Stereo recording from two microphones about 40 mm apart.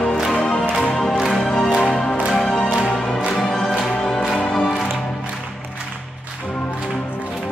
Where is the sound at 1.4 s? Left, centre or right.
Centre.